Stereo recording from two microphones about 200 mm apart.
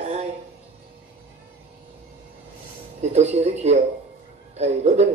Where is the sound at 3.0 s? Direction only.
35° right (ahead or behind).